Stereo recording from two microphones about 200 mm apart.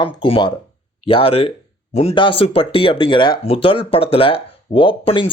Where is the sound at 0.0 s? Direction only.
25° left (ahead or behind).